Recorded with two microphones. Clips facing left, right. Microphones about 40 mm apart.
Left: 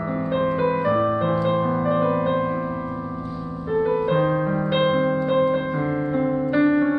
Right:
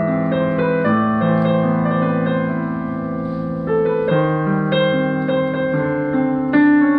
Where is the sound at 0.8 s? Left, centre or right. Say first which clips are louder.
Right 4 dB; right.